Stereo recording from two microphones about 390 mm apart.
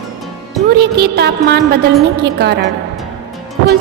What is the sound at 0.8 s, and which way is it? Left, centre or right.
A woman's voice, right.